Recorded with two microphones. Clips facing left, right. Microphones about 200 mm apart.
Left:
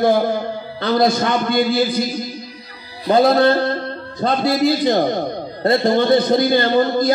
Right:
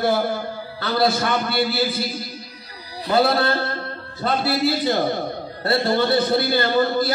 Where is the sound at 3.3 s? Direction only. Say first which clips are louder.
Left 7 dB; 15° left (ahead or behind).